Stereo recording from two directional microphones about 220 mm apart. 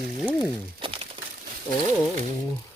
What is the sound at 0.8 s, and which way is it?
Crumpling, 25° right (ahead or behind).